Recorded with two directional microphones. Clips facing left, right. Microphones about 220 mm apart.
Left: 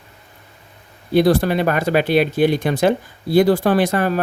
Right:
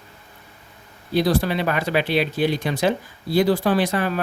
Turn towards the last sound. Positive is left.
turn(degrees=50)  # may be behind; listen again after turning